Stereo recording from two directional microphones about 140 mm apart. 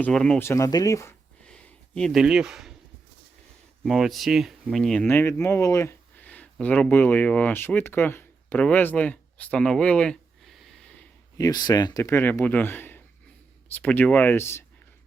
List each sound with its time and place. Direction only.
0.0 s speech: 5° left (ahead or behind)
0.3 s speech: 20° left (ahead or behind)
1.5 s a sound: 5° left (ahead or behind)
3.8 s speech: centre (ahead or behind)
5.0 s speech: 15° left (ahead or behind)
11.3 s speech: 25° left (ahead or behind)